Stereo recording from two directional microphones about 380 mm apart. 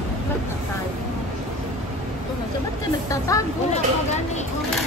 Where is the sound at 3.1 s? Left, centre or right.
Centre.